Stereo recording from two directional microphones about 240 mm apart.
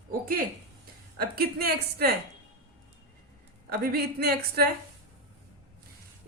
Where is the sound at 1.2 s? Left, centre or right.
Right.